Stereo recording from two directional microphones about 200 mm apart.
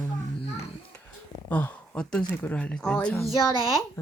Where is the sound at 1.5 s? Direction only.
5° left (ahead or behind).